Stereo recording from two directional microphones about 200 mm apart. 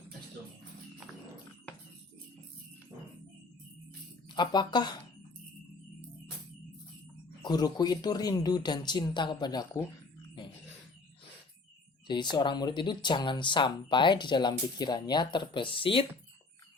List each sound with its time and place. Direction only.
4.3 s speech: 20° left (ahead or behind)
7.4 s speech: 20° left (ahead or behind)
12.0 s speech: 20° left (ahead or behind)